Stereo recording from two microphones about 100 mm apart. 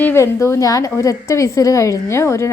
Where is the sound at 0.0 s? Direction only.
25° left (ahead or behind).